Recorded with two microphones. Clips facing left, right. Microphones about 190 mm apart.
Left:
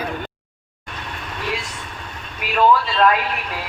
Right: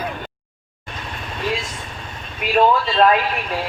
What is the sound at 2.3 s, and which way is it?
Speech, 25° right (ahead or behind).